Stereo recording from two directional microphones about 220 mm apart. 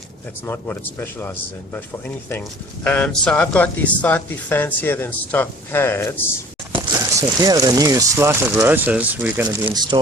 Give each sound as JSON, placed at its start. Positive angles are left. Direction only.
{"t": 0.4, "sound": "speech", "side_deg": 10}
{"t": 6.7, "sound": "speech", "side_deg": -20}
{"t": 9.7, "sound": "speech", "side_deg": -20}